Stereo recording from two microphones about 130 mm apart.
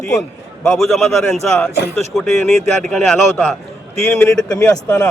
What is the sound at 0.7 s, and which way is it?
Speech, centre (ahead or behind).